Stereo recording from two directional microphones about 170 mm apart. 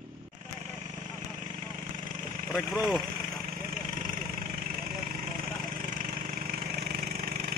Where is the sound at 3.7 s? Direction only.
50° right (ahead or behind).